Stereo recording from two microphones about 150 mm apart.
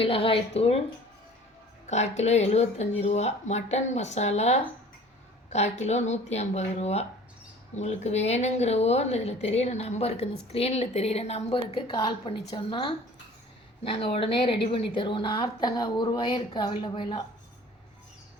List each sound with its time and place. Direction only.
0.0 s a woman's voice: 40° left (ahead or behind)
1.9 s a woman's voice: 50° left (ahead or behind)